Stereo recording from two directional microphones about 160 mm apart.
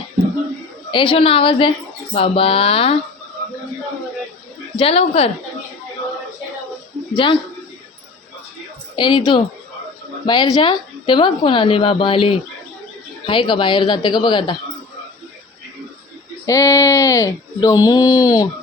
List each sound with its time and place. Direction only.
0.9 s a woman's voice: 30° left (ahead or behind)
4.8 s a woman's voice: 35° left (ahead or behind)
7.1 s a woman's voice: 30° left (ahead or behind)
9.0 s a woman's voice: 30° left (ahead or behind)
16.5 s speech: 20° left (ahead or behind)